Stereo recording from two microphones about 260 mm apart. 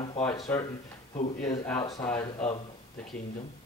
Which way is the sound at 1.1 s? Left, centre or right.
Left.